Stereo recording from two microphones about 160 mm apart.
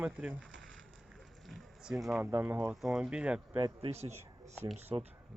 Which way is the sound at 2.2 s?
15° right (ahead or behind).